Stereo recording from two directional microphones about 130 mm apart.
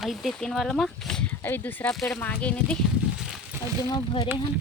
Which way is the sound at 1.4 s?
15° left (ahead or behind).